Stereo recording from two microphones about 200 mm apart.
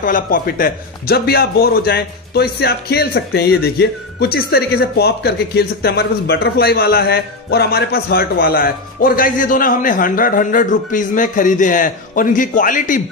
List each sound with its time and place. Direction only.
0.0 s a man's voice: 45° left (ahead or behind)